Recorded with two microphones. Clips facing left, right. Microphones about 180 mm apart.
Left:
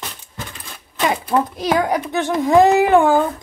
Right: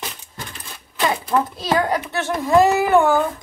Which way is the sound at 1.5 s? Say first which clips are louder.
Left 2 dB; 15° left (ahead or behind).